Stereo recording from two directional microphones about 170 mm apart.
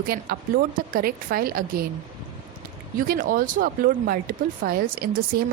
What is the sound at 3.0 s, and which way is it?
A woman's voice, 55° right (ahead or behind).